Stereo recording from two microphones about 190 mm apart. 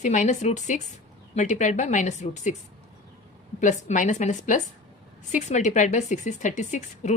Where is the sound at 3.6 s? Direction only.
40° left (ahead or behind).